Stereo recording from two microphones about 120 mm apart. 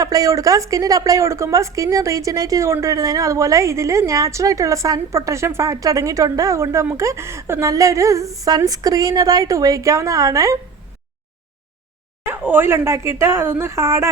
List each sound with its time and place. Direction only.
0.0 s speech: 30° right (ahead or behind)
12.2 s speech: 15° right (ahead or behind)